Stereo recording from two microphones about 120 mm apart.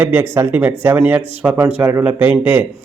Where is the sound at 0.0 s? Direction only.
20° right (ahead or behind).